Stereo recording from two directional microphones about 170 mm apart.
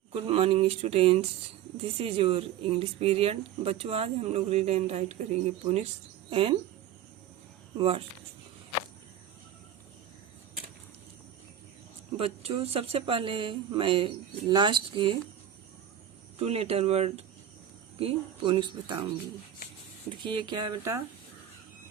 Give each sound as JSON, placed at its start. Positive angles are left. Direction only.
{"t": 0.1, "sound": "speech", "side_deg": -35}
{"t": 7.8, "sound": "speech", "side_deg": -35}
{"t": 12.1, "sound": "speech", "side_deg": -35}
{"t": 16.4, "sound": "speech", "side_deg": -35}
{"t": 20.1, "sound": "speech", "side_deg": -25}